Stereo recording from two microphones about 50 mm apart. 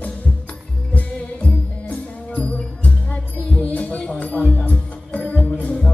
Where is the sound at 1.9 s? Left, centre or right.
Left.